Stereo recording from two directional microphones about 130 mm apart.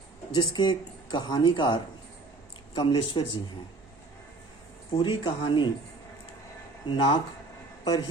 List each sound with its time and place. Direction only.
0.3 s speech: 35° left (ahead or behind)
4.9 s speech: 40° left (ahead or behind)
6.8 s speech: 40° left (ahead or behind)